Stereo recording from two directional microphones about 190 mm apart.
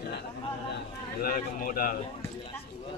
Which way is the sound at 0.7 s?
50° left (ahead or behind).